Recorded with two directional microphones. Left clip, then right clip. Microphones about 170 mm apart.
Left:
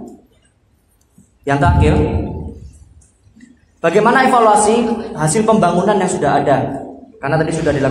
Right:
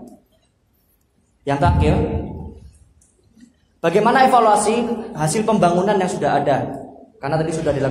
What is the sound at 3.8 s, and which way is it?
Speech, 50° right (ahead or behind).